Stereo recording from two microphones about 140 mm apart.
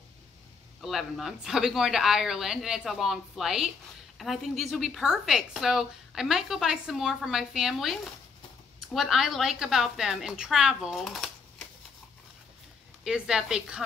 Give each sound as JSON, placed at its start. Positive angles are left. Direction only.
{"t": 0.7, "sound": "a woman's voice", "side_deg": 0}
{"t": 13.0, "sound": "a woman's voice", "side_deg": -5}